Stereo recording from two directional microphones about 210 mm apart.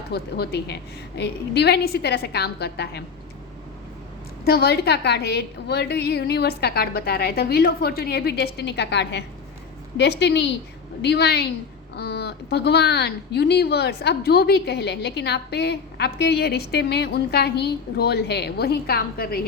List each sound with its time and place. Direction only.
0.1 s speech: 50° left (ahead or behind)
4.4 s a woman's voice: 50° left (ahead or behind)